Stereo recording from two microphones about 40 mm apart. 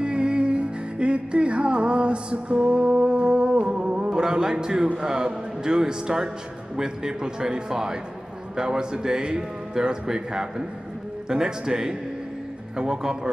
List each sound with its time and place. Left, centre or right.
0.0 s music: right
5.0 s a man's voice: centre